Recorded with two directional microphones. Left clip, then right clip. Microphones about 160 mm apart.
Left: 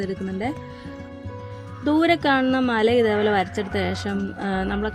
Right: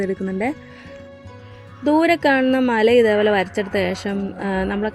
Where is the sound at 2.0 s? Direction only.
15° right (ahead or behind).